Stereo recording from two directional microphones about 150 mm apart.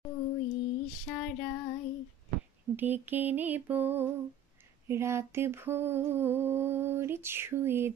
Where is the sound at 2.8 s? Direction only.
10° right (ahead or behind).